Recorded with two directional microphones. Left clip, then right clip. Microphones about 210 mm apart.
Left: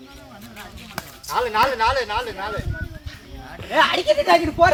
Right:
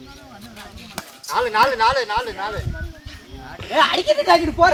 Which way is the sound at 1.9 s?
60° left (ahead or behind).